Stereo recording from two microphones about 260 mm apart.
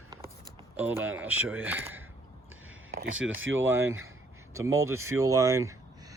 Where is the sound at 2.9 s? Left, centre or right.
Right.